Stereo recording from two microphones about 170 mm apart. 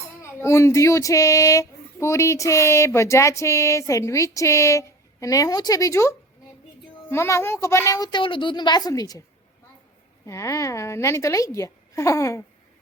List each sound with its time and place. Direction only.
0.2 s a woman's voice: 15° left (ahead or behind)
10.2 s speech: 15° left (ahead or behind)